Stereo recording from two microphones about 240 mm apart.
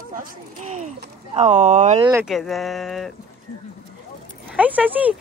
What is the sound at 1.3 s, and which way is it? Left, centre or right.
Speech, right.